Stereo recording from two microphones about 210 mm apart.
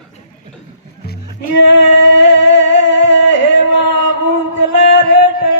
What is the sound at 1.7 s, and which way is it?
Music, 55° left (ahead or behind).